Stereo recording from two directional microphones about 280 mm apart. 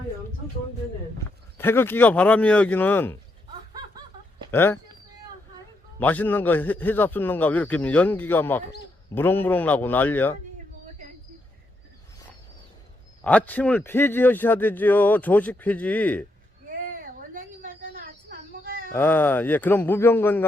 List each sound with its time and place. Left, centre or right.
1.5 s a man's voice: centre
4.5 s a man's voice: centre
6.0 s a man's voice: centre
13.2 s a man's voice: centre
16.6 s a sound: right
18.9 s a man's voice: centre